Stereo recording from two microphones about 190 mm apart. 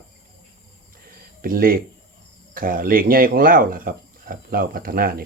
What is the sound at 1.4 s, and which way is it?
Speech, 50° right (ahead or behind).